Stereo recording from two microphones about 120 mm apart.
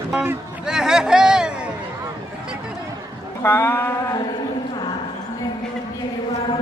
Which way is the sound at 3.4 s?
20° left (ahead or behind).